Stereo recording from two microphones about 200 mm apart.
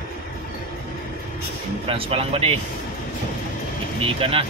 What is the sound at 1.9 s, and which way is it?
Speech, 25° right (ahead or behind).